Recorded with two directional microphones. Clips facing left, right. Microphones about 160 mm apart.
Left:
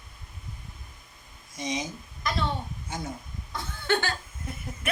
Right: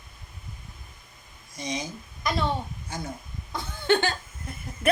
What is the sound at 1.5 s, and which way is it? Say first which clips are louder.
Speech: left 1 dB; 20° left (ahead or behind).